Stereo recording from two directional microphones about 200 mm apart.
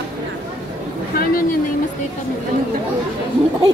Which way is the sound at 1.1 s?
45° left (ahead or behind).